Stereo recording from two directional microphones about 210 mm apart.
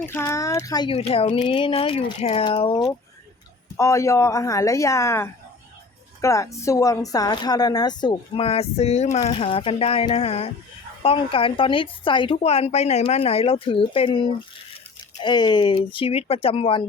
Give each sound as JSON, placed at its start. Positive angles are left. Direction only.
{"t": 0.0, "sound": "a woman's voice", "side_deg": 10}